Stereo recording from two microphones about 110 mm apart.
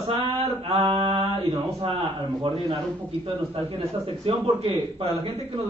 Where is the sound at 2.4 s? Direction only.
55° right (ahead or behind).